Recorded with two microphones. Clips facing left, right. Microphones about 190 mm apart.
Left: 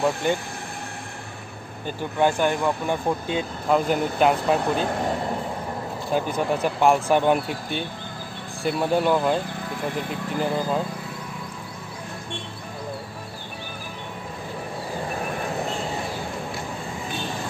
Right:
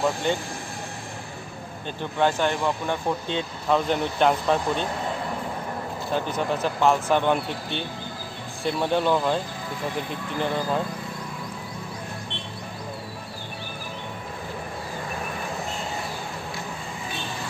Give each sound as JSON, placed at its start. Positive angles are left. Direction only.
{"t": 1.9, "sound": "speech", "side_deg": 10}
{"t": 6.1, "sound": "speech", "side_deg": 10}
{"t": 10.4, "sound": "speech", "side_deg": 5}